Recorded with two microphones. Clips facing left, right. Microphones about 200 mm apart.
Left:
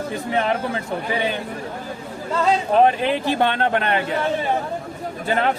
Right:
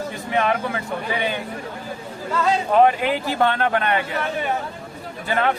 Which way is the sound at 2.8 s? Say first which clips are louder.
Left 1 dB; 25° left (ahead or behind).